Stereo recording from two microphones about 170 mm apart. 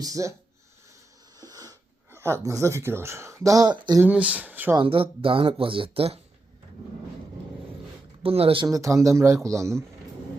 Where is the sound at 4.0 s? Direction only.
5° right (ahead or behind).